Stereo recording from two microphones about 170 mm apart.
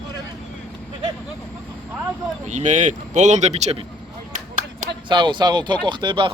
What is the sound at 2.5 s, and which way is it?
Speech, 45° right (ahead or behind).